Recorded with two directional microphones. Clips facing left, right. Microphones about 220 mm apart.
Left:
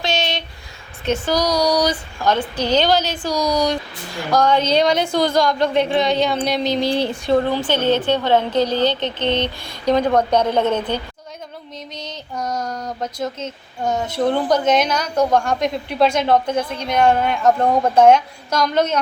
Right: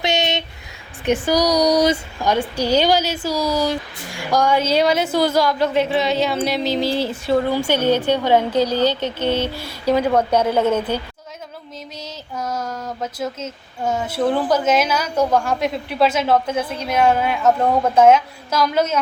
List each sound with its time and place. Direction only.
0.0 s a sound: 20° right (ahead or behind)
1.0 s speech: 15° right (ahead or behind)
2.2 s speech: 10° right (ahead or behind)
11.9 s female singing: 5° right (ahead or behind)